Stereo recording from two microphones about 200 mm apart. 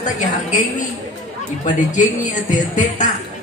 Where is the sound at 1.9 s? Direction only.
40° left (ahead or behind).